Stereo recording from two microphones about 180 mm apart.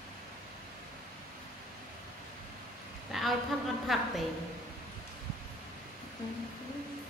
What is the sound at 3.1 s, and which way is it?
A woman's voice, centre (ahead or behind).